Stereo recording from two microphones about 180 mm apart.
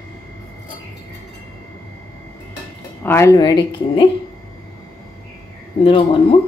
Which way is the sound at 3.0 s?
15° left (ahead or behind).